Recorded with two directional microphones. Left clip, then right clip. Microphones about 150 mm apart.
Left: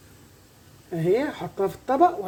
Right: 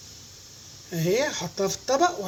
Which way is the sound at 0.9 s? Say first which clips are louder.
Left 1 dB; 30° left (ahead or behind).